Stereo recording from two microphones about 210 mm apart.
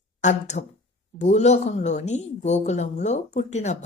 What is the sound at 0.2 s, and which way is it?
Speech, 35° left (ahead or behind).